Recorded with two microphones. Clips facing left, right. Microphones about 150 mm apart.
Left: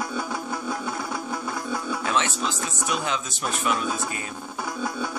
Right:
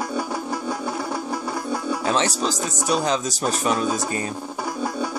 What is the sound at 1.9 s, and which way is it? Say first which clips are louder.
Speech: right 4 dB; 35° right (ahead or behind).